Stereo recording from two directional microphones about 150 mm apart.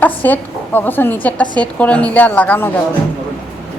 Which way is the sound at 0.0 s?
10° left (ahead or behind).